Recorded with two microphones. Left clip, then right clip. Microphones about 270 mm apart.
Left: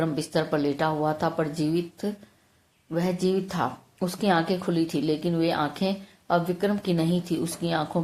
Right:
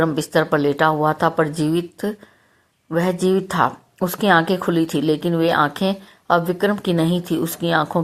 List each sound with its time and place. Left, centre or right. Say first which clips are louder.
0.0 s speech: right 8 dB; right